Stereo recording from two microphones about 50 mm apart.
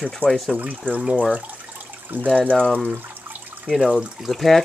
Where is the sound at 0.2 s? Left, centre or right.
Right.